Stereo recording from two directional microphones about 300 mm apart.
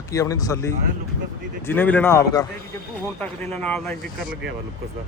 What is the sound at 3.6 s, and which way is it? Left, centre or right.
Speech, centre.